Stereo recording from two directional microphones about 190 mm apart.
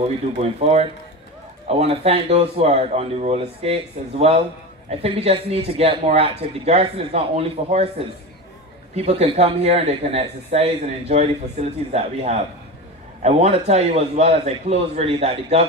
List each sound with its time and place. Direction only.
0.4 s a man's voice: 35° right (ahead or behind)
8.9 s a man's voice: 35° right (ahead or behind)